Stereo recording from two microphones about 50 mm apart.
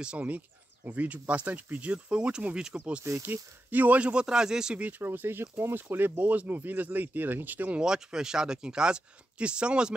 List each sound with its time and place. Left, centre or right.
0.8 s speech: right
3.0 s speech: right; by 4.8 s centre
5.0 s speech: right
7.8 s speech: centre